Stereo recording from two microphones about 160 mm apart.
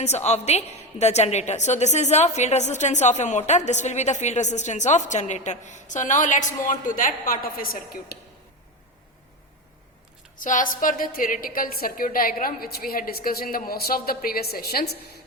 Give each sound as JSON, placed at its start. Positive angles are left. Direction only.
{"t": 0.0, "sound": "a woman's voice", "side_deg": 45}
{"t": 10.4, "sound": "a woman's voice", "side_deg": 55}